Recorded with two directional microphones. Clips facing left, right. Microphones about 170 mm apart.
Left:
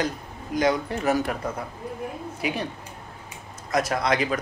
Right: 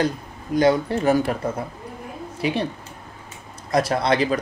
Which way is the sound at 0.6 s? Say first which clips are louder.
Right 5 dB; 30° right (ahead or behind).